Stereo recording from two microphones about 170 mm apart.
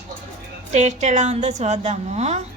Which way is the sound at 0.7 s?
45° right (ahead or behind).